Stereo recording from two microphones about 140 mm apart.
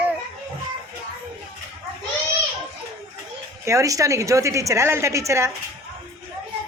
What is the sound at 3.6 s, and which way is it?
Speech, 20° right (ahead or behind).